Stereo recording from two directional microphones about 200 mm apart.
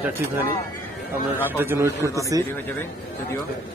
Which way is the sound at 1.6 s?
10° right (ahead or behind).